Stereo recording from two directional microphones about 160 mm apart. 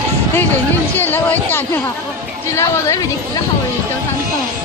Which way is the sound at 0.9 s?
10° left (ahead or behind).